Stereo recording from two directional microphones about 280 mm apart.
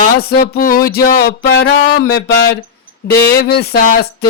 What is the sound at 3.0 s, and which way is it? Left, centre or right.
Speech, left.